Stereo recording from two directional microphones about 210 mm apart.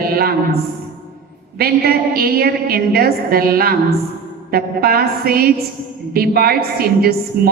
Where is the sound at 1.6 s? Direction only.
45° right (ahead or behind).